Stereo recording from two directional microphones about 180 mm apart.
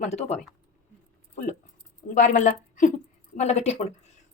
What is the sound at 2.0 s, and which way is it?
A woman's voice, 45° left (ahead or behind).